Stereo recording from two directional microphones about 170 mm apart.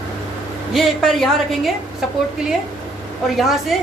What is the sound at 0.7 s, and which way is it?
A woman's voice, centre (ahead or behind).